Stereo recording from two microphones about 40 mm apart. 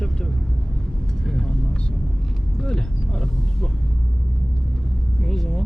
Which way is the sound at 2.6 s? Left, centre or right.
Centre.